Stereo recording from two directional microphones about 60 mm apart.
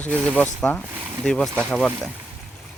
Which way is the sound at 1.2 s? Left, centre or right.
Centre.